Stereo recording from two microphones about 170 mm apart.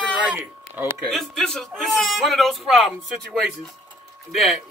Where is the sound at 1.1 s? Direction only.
Centre (ahead or behind).